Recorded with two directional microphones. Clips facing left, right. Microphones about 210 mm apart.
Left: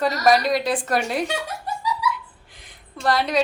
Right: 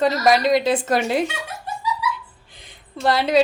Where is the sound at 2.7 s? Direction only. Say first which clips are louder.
Right 2 dB; 25° right (ahead or behind).